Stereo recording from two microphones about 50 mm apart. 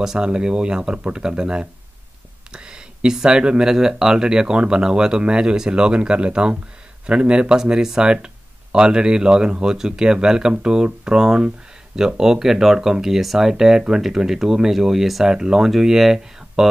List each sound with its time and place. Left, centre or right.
0.0 s speech: centre